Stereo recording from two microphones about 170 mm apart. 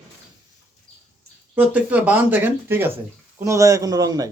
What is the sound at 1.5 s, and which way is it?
A man's voice, 10° right (ahead or behind).